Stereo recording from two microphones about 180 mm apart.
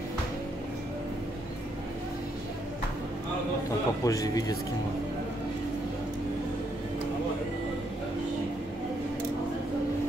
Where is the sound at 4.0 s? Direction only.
20° left (ahead or behind).